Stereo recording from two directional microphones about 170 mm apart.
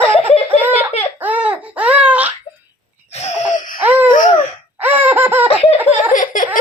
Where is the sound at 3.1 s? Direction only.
45° left (ahead or behind).